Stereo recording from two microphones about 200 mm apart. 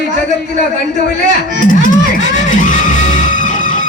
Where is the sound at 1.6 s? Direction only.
40° left (ahead or behind).